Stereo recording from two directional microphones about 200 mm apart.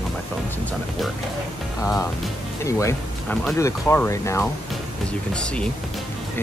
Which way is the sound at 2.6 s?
15° left (ahead or behind).